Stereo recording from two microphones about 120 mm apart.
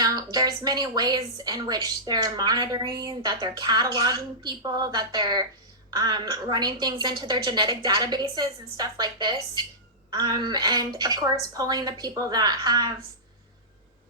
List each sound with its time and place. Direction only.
0.0 s a woman's voice: 35° right (ahead or behind)